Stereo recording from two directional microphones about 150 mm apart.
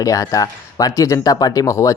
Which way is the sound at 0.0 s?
20° left (ahead or behind).